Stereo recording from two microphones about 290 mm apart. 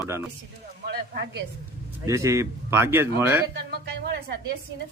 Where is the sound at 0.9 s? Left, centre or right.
Right.